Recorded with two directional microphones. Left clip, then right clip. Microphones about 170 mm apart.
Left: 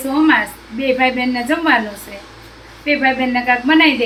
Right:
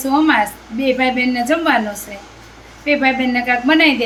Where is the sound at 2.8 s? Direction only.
15° right (ahead or behind).